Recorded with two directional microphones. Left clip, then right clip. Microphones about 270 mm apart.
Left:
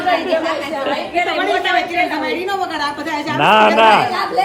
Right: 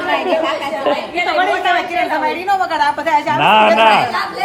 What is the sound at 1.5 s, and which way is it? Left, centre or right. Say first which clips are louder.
A woman's voice: right 1 dB; centre.